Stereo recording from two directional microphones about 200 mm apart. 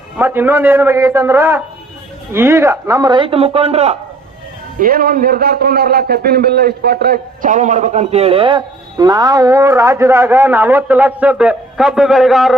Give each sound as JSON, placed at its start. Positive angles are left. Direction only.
{"t": 0.2, "sound": "a man's voice", "side_deg": -10}
{"t": 4.8, "sound": "a man's voice", "side_deg": -50}